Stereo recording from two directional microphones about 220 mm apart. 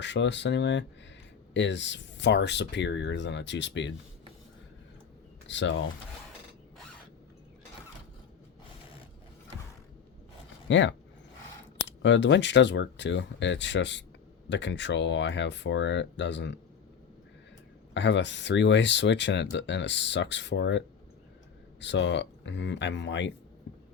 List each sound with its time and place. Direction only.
0.0 s speech: 55° left (ahead or behind)
5.5 s speech: 55° left (ahead or behind)
10.7 s speech: 55° left (ahead or behind)
17.9 s speech: 55° left (ahead or behind)